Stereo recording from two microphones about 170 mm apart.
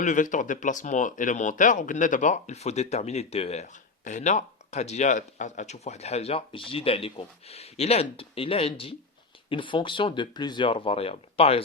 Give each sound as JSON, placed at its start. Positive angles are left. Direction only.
{"t": 0.0, "sound": "speech", "side_deg": 50}